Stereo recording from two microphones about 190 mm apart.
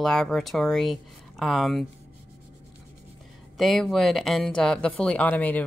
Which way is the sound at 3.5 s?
Centre (ahead or behind).